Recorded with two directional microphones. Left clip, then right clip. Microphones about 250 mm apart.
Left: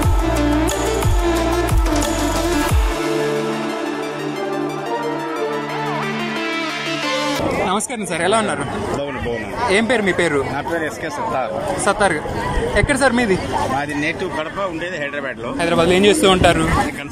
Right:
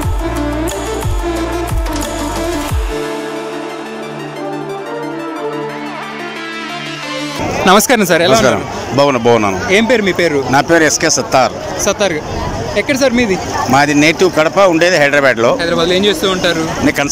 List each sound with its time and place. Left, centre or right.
7.6 s speech: right
8.2 s speech: centre
9.7 s speech: centre
10.5 s speech: right
11.8 s speech: centre
13.7 s speech: right
15.5 s speech: centre